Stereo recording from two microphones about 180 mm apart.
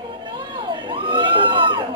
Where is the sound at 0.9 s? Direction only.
25° right (ahead or behind).